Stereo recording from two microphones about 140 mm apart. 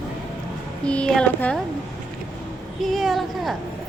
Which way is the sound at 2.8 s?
Centre (ahead or behind).